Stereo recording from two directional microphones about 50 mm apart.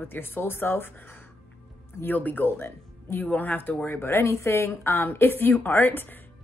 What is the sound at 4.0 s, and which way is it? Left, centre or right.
A woman's voice, left.